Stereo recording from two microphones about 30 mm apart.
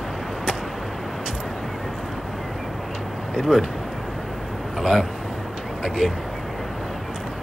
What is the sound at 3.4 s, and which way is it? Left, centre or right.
Speech, centre.